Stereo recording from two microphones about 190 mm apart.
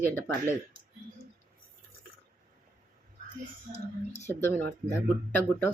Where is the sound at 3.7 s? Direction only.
35° left (ahead or behind).